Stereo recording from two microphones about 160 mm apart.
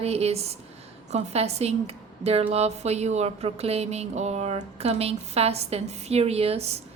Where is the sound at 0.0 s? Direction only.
40° right (ahead or behind).